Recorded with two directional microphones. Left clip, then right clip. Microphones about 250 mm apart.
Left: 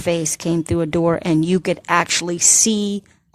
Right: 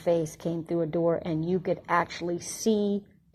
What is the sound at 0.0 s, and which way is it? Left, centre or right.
Speech, left.